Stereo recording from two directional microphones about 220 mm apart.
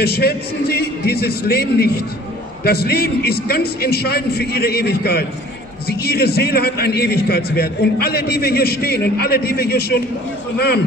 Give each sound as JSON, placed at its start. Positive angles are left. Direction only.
{"t": 0.0, "sound": "a man's voice", "side_deg": 45}